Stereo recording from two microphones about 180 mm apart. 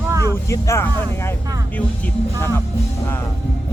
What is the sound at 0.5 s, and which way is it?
Speech, 15° left (ahead or behind).